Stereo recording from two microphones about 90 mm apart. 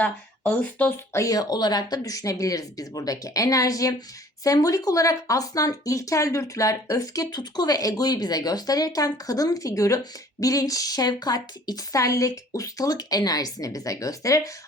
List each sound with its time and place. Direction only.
0.0 s speech: 15° left (ahead or behind)
1.1 s speech: 40° left (ahead or behind)